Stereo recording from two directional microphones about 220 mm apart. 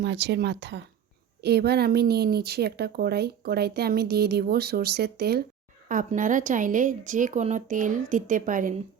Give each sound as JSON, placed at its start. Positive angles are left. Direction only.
{"t": 0.0, "sound": "speech", "side_deg": -50}